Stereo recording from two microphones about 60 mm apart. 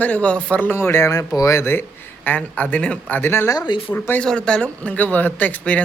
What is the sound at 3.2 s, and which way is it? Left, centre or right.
Speech, left.